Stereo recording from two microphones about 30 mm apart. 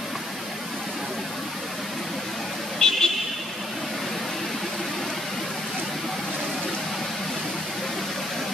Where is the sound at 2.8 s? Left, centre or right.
Left.